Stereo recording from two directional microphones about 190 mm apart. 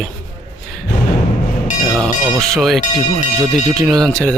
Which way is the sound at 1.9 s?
Centre (ahead or behind).